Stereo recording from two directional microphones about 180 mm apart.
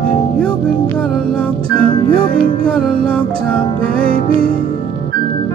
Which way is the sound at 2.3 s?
30° right (ahead or behind).